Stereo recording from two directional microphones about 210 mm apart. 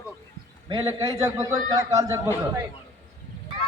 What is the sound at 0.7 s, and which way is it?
Speech, 20° right (ahead or behind).